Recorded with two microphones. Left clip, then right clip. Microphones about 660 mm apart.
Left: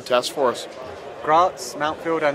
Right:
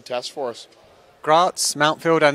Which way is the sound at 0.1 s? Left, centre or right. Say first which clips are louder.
Left 7 dB; right.